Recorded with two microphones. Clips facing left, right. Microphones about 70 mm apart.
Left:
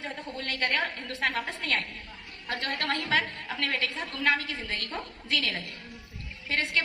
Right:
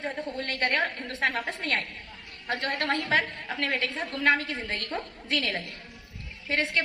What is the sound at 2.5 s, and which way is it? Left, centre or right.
A woman's voice, right.